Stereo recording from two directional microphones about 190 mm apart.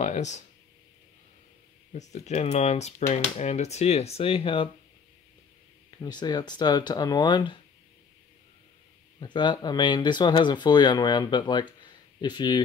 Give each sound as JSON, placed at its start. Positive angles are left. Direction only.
{"t": 0.0, "sound": "speech", "side_deg": 40}
{"t": 1.9, "sound": "speech", "side_deg": 35}
{"t": 5.9, "sound": "speech", "side_deg": 20}
{"t": 9.2, "sound": "speech", "side_deg": 25}